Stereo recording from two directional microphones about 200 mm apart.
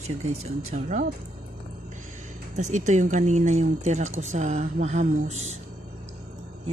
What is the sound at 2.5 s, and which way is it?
A woman's voice, 35° right (ahead or behind).